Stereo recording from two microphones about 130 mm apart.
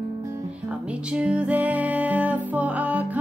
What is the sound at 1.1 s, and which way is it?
Music, 10° right (ahead or behind).